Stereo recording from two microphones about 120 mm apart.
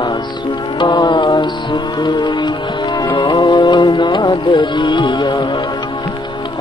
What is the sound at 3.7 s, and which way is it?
Music, 35° left (ahead or behind).